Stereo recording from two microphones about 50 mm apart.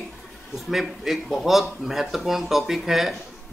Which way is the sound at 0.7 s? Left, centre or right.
Centre.